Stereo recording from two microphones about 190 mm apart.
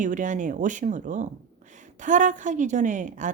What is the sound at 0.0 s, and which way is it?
Speech, 40° right (ahead or behind).